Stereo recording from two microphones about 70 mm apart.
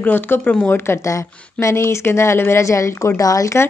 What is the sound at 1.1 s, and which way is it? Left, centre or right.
Speech, left.